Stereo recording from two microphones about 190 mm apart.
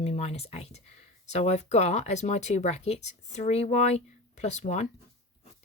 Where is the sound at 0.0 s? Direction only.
35° left (ahead or behind).